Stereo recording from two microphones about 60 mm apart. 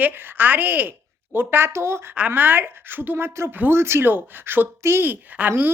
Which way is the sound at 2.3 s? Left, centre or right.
Right.